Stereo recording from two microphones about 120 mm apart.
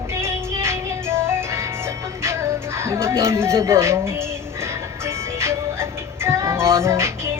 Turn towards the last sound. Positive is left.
turn(degrees=-20)  # may be behind; listen again after turning